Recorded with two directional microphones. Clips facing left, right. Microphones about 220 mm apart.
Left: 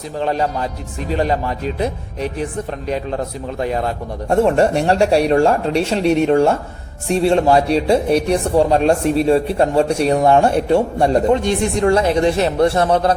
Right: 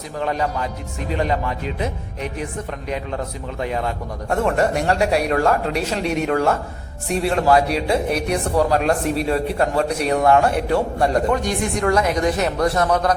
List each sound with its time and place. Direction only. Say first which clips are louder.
0.2 s speech: left 3 dB; 30° left (ahead or behind)